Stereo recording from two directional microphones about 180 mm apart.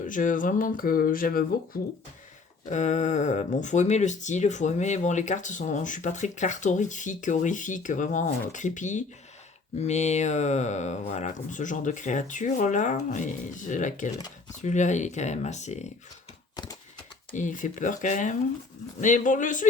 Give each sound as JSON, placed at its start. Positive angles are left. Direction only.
{"t": 0.0, "sound": "speech", "side_deg": 45}
{"t": 2.6, "sound": "speech", "side_deg": 40}
{"t": 17.3, "sound": "speech", "side_deg": 45}